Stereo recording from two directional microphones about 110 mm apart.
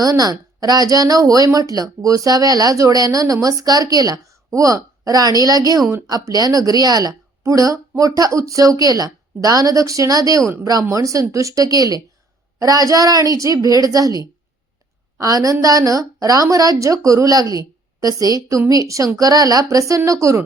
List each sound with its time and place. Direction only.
0.0 s a woman's voice: 35° right (ahead or behind)